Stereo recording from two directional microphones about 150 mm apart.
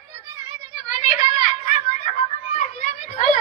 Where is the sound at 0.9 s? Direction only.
50° left (ahead or behind).